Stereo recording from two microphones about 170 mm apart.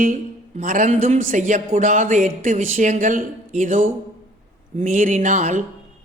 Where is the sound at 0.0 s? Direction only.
50° right (ahead or behind).